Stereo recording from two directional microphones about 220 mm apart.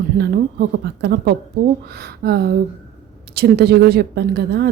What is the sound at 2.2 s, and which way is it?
A woman's voice, 45° right (ahead or behind).